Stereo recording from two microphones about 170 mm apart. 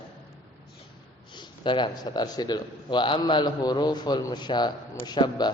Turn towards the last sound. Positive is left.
turn(degrees=25)  # may be behind; listen again after turning